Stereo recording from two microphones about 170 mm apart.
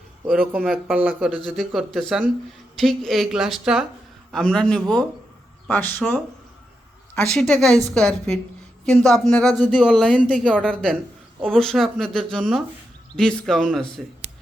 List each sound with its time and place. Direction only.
0.6 s speech: centre (ahead or behind)